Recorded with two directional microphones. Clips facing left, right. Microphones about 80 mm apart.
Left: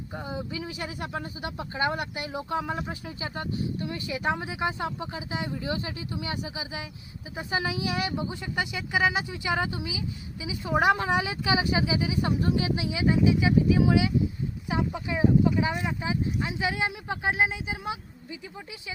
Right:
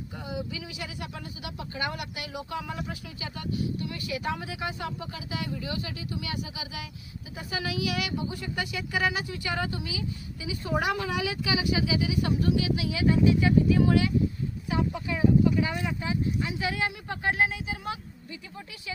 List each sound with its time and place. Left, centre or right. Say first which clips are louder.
0.3 s a woman's voice: left 1 dB; left; by 10.8 s centre
10.8 s speech: left 6 dB; left